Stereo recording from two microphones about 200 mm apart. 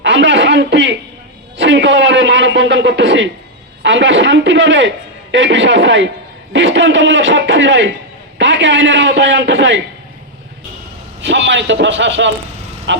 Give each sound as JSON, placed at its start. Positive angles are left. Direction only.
{"t": 0.0, "sound": "a sound", "side_deg": -65}
{"t": 3.8, "sound": "a man's voice", "side_deg": -70}
{"t": 11.2, "sound": "a man's voice", "side_deg": -65}